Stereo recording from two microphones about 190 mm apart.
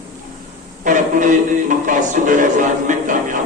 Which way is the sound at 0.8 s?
40° right (ahead or behind).